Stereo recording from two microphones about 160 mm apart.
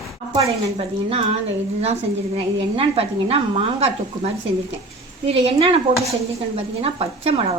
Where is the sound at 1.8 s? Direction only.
40° right (ahead or behind).